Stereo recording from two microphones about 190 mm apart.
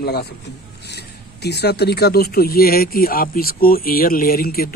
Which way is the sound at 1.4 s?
60° left (ahead or behind).